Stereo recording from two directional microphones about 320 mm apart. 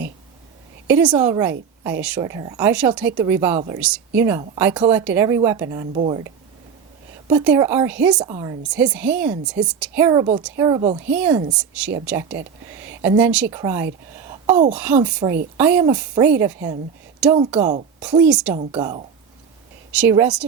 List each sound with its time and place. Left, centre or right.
0.9 s a woman's voice: centre
7.3 s a woman's voice: centre
14.3 s a sound: centre
14.7 s a woman's voice: centre
17.6 s a woman's voice: right
18.1 s a woman's voice: centre
18.6 s a woman's voice: centre